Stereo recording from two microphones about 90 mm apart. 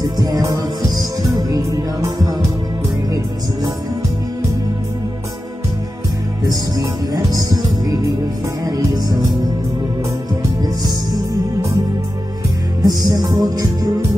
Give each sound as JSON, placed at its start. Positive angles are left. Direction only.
{"t": 0.0, "sound": "music", "side_deg": -45}
{"t": 6.4, "sound": "music", "side_deg": -45}
{"t": 12.8, "sound": "music", "side_deg": -45}